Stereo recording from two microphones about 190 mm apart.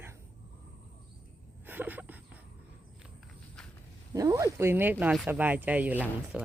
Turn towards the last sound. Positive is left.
turn(degrees=-10)  # may be behind; listen again after turning